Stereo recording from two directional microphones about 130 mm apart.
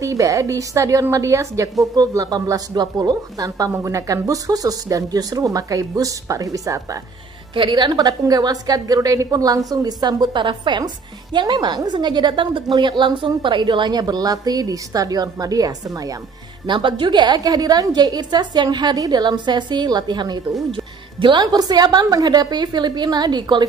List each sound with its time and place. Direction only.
0.0 s a woman's voice: 25° right (ahead or behind)
7.5 s a woman's voice: 40° right (ahead or behind)
16.6 s a woman's voice: 40° right (ahead or behind)